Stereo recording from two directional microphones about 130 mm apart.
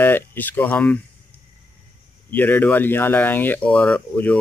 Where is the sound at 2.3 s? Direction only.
15° left (ahead or behind).